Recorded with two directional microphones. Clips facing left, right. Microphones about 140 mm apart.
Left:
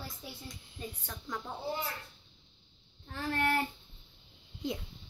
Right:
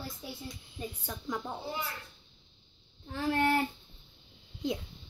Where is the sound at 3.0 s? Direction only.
15° right (ahead or behind).